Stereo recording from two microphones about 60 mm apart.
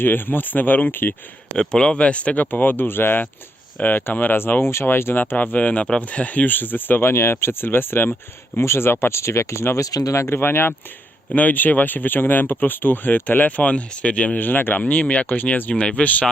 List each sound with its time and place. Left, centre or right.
0.0 s speech: left
1.5 s speech: centre; by 5.2 s left
5.2 s speech: left
8.5 s speech: left
10.1 s speech: left; by 14.4 s centre
14.4 s speech: left